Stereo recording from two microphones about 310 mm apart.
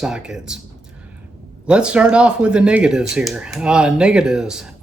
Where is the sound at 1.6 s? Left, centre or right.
Centre.